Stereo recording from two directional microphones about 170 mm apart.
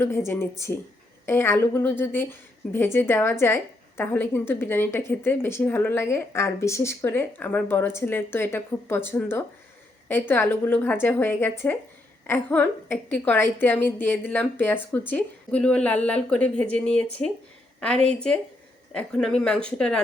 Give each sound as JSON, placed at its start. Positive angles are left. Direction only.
{"t": 0.3, "sound": "a woman's voice", "side_deg": 15}